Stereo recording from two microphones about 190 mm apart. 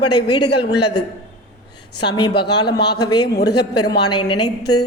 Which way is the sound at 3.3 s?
60° left (ahead or behind).